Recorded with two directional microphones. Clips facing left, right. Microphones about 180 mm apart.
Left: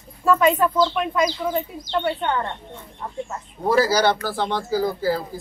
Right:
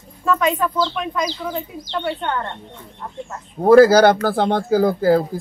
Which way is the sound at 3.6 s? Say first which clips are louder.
Right 9 dB; 55° right (ahead or behind).